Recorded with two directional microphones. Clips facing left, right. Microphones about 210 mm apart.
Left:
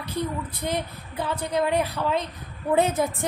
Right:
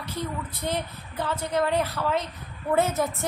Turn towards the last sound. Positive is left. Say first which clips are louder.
# left 2 dB
turn(degrees=15)  # may be behind; listen again after turning